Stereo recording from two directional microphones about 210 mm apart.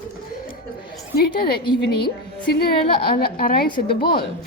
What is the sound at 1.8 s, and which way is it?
A woman's voice, 50° left (ahead or behind).